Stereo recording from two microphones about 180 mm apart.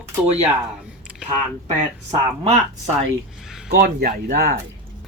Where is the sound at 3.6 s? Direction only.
55° right (ahead or behind).